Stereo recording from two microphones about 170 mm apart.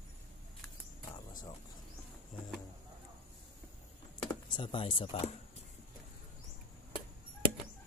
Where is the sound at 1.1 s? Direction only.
50° left (ahead or behind).